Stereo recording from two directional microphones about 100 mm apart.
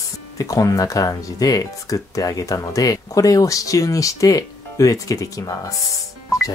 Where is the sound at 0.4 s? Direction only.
35° left (ahead or behind).